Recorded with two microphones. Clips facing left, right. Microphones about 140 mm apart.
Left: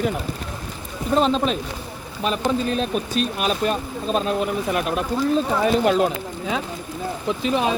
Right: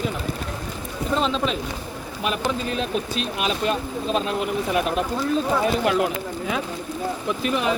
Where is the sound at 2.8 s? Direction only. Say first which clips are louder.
Left 3 dB; 45° left (ahead or behind).